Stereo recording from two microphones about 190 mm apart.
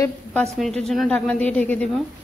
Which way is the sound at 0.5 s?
Centre (ahead or behind).